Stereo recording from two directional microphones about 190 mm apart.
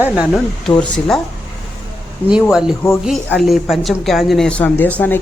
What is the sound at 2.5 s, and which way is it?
A woman's voice, 5° right (ahead or behind).